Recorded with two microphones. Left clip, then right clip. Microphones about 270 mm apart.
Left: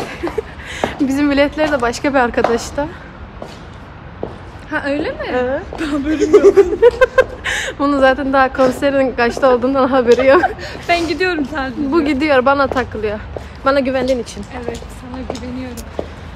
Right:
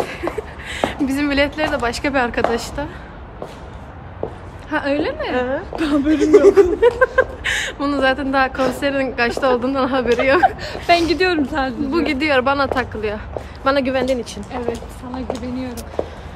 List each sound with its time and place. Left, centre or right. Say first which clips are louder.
0.0 s speech: left 1 dB; centre
4.6 s speech: left 1 dB; centre
5.8 s speech: right 1 dB; centre
6.2 s a woman's voice: left 2 dB; centre
11.9 s a woman's voice: left 5 dB; centre